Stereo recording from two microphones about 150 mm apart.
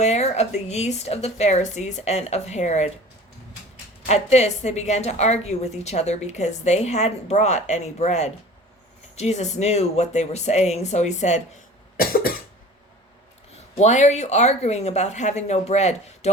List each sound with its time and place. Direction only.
0.0 s a woman's voice: 45° left (ahead or behind)
4.0 s a woman's voice: 45° left (ahead or behind)
11.9 s cough: 80° left
13.7 s a woman's voice: 50° left (ahead or behind)